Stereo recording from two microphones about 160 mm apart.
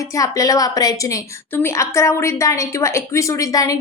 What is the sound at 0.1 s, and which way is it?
A woman's voice, 20° left (ahead or behind).